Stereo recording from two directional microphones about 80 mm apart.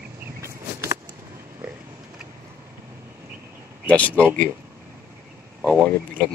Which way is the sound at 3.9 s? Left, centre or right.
Centre.